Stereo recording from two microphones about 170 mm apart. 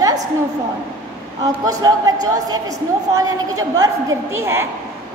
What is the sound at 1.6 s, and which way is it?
Speech, 20° right (ahead or behind).